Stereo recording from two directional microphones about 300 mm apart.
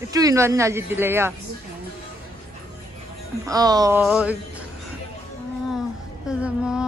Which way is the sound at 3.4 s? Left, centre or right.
Centre.